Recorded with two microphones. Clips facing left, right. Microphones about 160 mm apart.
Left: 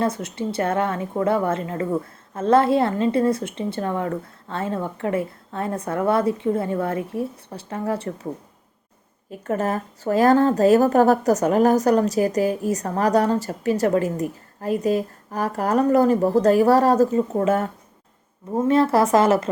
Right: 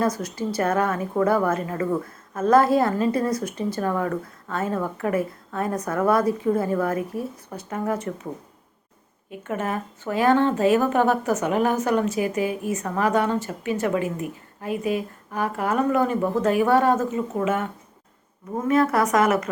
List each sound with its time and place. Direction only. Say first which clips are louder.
0.0 s a woman's voice: even; 25° left (ahead or behind)
9.4 s a woman's voice: left 4 dB; 40° left (ahead or behind)